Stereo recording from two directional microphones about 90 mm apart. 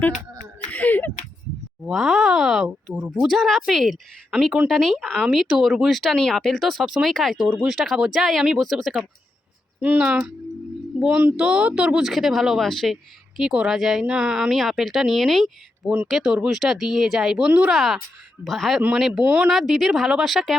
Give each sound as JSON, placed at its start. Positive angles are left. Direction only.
{"t": 0.7, "sound": "a sound", "side_deg": 20}
{"t": 1.9, "sound": "speech", "side_deg": -5}
{"t": 9.8, "sound": "speech", "side_deg": -15}
{"t": 11.3, "sound": "speech", "side_deg": -10}
{"t": 19.2, "sound": "speech", "side_deg": -15}
{"t": 19.5, "sound": "speech", "side_deg": 0}